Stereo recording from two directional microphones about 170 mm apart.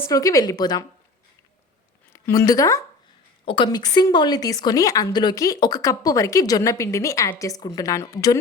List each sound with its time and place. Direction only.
0.0 s a woman's voice: 20° left (ahead or behind)
2.1 s a woman's voice: 15° left (ahead or behind)